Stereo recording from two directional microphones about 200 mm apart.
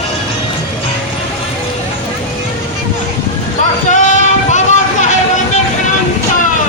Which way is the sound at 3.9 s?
35° left (ahead or behind).